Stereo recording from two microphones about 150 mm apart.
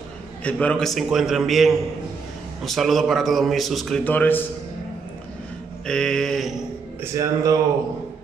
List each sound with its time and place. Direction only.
0.4 s a man's voice: 10° left (ahead or behind)
4.0 s a man's voice: 10° left (ahead or behind)
5.9 s a man's voice: 5° left (ahead or behind)
7.0 s speech: 20° right (ahead or behind)